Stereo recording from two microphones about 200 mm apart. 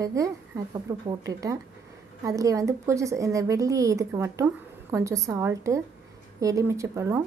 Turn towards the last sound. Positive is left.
turn(degrees=-15)  # may be behind; listen again after turning